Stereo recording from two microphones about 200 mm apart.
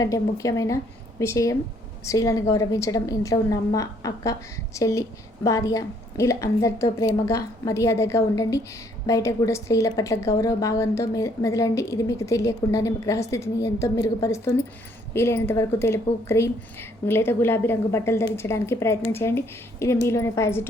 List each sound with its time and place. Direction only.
0.0 s a woman's voice: 15° left (ahead or behind)